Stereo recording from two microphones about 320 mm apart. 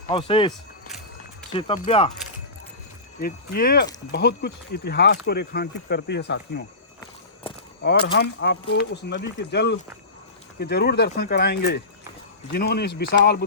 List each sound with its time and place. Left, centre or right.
0.1 s speech: centre
0.9 s run: centre
1.5 s speech: centre
3.2 s speech: left
7.4 s a sound: centre
8.0 s speech: left